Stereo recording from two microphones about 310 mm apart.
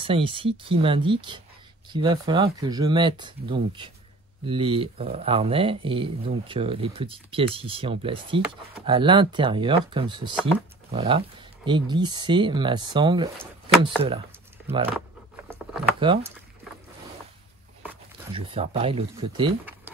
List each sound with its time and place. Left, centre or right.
0.0 s speech: centre
16.0 s speech: centre
18.3 s speech: centre